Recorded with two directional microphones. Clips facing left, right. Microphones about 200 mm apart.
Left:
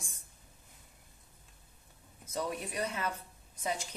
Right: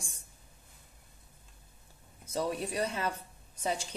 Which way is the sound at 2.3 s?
30° right (ahead or behind).